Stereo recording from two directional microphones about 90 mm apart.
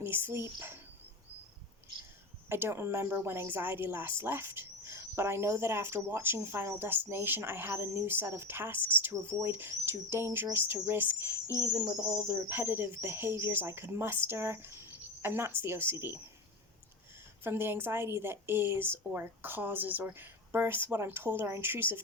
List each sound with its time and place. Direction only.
0.0 s speech: 25° right (ahead or behind)
2.5 s speech: 25° right (ahead or behind)
17.4 s speech: 25° right (ahead or behind)